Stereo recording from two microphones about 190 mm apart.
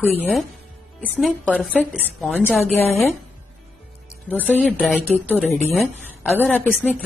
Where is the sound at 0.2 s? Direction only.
Centre (ahead or behind).